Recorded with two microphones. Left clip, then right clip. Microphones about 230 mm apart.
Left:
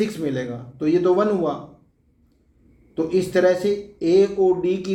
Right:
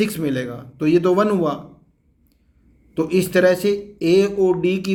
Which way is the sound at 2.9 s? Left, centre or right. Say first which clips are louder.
Right 2 dB; right.